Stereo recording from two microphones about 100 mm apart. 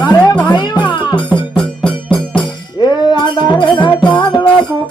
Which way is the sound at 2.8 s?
50° left (ahead or behind).